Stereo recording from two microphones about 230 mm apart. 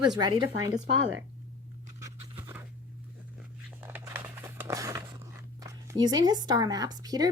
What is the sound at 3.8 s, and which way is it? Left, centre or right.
Crumpling, centre.